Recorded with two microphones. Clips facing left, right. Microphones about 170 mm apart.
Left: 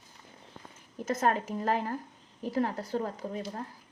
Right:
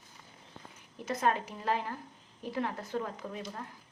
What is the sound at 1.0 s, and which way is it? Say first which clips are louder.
A woman's voice: left 2 dB; 45° left (ahead or behind).